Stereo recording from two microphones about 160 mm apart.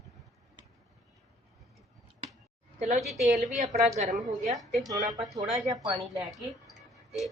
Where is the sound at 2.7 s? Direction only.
50° right (ahead or behind).